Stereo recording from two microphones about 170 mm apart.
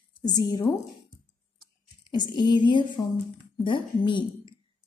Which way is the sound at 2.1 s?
25° left (ahead or behind).